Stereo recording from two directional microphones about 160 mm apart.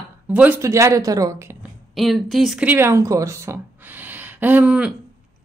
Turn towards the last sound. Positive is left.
turn(degrees=-5)  # may be behind; listen again after turning